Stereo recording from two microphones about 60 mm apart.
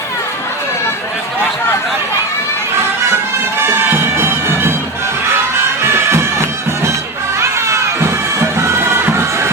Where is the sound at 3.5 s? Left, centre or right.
Right.